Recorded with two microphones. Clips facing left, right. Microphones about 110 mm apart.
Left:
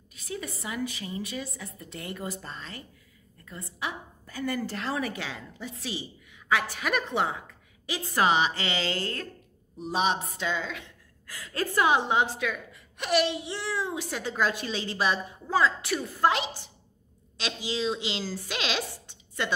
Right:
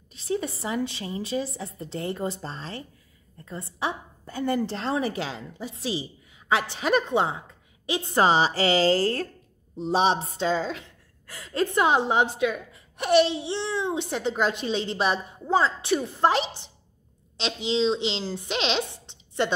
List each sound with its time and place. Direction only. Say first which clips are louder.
0.1 s a woman's voice: right 8 dB; 30° right (ahead or behind)